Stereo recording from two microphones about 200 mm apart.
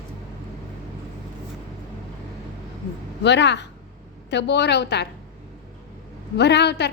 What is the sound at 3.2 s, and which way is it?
A woman's voice, 60° left (ahead or behind).